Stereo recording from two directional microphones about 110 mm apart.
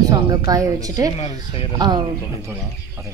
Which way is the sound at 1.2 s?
65° left (ahead or behind).